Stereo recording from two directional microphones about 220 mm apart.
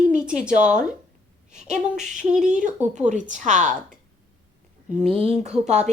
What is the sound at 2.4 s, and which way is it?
A woman's voice, 35° right (ahead or behind).